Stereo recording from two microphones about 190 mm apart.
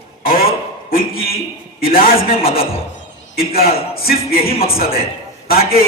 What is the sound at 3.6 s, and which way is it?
Music, 55° left (ahead or behind).